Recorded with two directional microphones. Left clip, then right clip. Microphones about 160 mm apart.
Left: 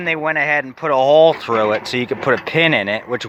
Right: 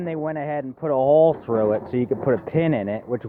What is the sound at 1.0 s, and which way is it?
Speech, 30° left (ahead or behind).